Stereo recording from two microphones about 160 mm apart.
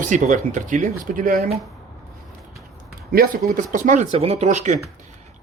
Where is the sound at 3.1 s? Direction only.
65° right (ahead or behind).